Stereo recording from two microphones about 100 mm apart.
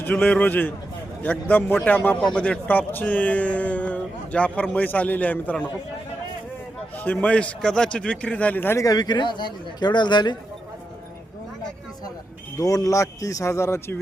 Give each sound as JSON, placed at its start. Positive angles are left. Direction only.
{"t": 0.0, "sound": "speech", "side_deg": 15}
{"t": 6.9, "sound": "speech", "side_deg": 15}
{"t": 8.8, "sound": "a man's voice", "side_deg": 40}
{"t": 12.5, "sound": "speech", "side_deg": 35}